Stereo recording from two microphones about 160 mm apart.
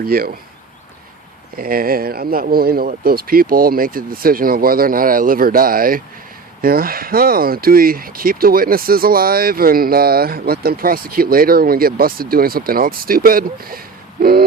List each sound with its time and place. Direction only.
0.0 s speech: 65° right (ahead or behind)
1.5 s speech: 65° right (ahead or behind)